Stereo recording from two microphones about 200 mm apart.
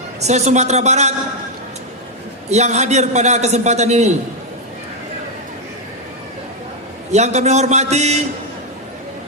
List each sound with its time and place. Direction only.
0.2 s a man's voice: 35° right (ahead or behind)
2.5 s a man's voice: 35° right (ahead or behind)
7.1 s a man's voice: 35° right (ahead or behind)